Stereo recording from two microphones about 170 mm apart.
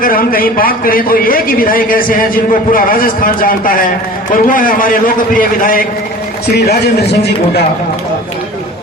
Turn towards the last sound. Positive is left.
turn(degrees=70)  # may be behind; listen again after turning